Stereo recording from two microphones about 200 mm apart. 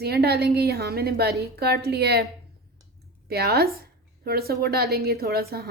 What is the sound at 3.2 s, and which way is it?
Speech, 50° right (ahead or behind).